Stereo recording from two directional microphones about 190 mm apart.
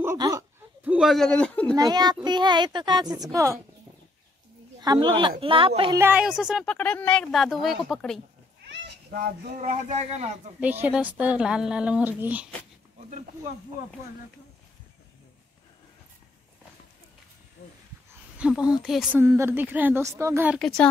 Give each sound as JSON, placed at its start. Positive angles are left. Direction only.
{"t": 0.0, "sound": "a sound", "side_deg": -15}
{"t": 0.8, "sound": "speech", "side_deg": 0}
{"t": 1.8, "sound": "a child's voice", "side_deg": -20}
{"t": 4.7, "sound": "a woman's voice", "side_deg": -20}
{"t": 5.9, "sound": "speech", "side_deg": -10}
{"t": 8.6, "sound": "children playing", "side_deg": -60}
{"t": 9.6, "sound": "speech", "side_deg": -35}
{"t": 10.6, "sound": "a woman's voice", "side_deg": -10}
{"t": 17.6, "sound": "dog", "side_deg": 55}
{"t": 18.4, "sound": "a woman's voice", "side_deg": -5}
{"t": 20.5, "sound": "speech", "side_deg": 5}